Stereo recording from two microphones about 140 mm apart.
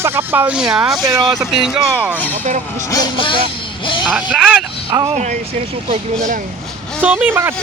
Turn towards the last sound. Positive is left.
turn(degrees=-15)  # may be behind; listen again after turning